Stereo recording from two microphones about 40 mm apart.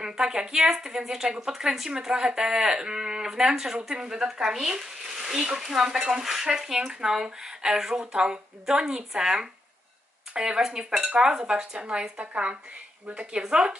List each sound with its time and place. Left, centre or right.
0.0 s speech: centre